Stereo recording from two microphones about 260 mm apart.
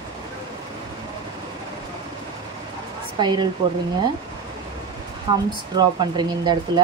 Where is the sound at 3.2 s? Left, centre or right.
Centre.